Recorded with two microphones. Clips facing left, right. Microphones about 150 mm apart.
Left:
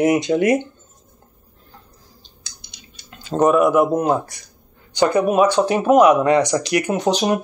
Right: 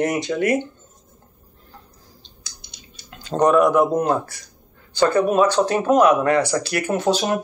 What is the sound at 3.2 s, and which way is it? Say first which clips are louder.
Speech: left 1 dB; 5° left (ahead or behind).